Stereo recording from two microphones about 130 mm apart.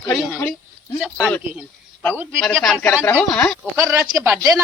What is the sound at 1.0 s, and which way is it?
Speech, 5° right (ahead or behind).